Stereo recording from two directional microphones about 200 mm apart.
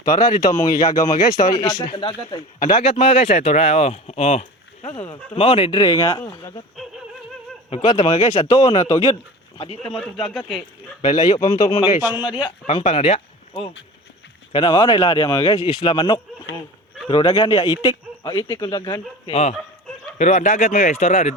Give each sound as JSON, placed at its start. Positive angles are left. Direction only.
{"t": 0.0, "sound": "speech", "side_deg": 20}
{"t": 7.7, "sound": "speech", "side_deg": 30}
{"t": 10.0, "sound": "speech", "side_deg": 0}
{"t": 11.0, "sound": "speech", "side_deg": 25}